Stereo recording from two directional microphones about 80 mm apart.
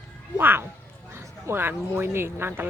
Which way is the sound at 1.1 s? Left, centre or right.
Right.